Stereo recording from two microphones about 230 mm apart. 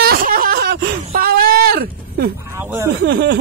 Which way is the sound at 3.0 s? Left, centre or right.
Right.